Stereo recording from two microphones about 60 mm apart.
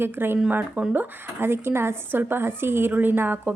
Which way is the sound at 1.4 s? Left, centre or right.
Right.